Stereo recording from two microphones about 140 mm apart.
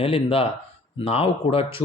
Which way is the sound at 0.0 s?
40° left (ahead or behind).